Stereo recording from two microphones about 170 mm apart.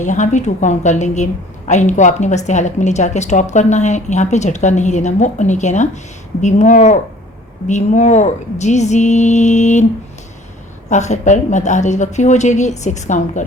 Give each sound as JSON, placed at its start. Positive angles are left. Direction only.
{"t": 0.0, "sound": "a woman's voice", "side_deg": 45}
{"t": 10.8, "sound": "a woman's voice", "side_deg": 45}